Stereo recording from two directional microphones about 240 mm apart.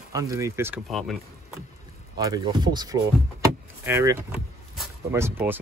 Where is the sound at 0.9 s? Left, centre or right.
Centre.